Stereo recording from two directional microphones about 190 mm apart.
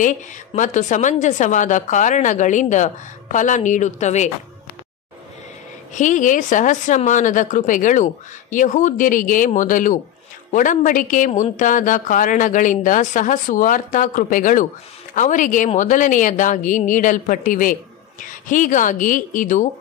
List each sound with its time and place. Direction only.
0.6 s a woman's voice: 40° left (ahead or behind)
5.9 s a woman's voice: 40° left (ahead or behind)